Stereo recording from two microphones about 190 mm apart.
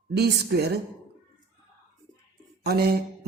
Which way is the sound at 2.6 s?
55° right (ahead or behind).